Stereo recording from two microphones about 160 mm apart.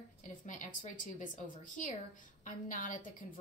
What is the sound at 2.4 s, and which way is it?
Speech, 55° left (ahead or behind).